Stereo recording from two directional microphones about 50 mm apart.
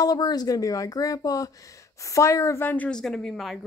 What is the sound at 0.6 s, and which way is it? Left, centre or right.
Speech, left.